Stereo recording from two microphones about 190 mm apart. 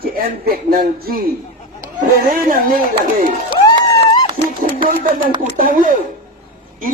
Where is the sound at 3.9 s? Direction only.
20° left (ahead or behind).